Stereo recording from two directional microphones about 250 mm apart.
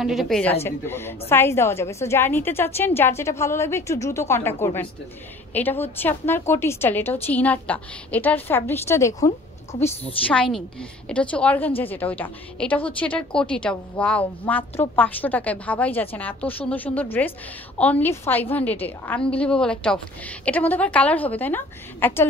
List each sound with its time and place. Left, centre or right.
0.0 s a woman's voice: centre